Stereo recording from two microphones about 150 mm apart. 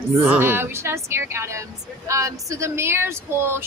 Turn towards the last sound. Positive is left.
turn(degrees=-15)  # may be behind; listen again after turning